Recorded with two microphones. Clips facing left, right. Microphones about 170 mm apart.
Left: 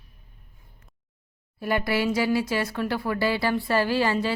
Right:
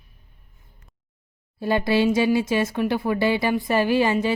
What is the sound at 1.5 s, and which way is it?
Speech, 25° right (ahead or behind).